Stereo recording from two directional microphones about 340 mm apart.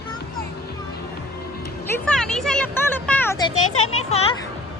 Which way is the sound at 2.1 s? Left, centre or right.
Centre.